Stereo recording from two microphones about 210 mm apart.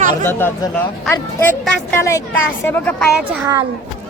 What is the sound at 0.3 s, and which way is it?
Speech, 10° left (ahead or behind).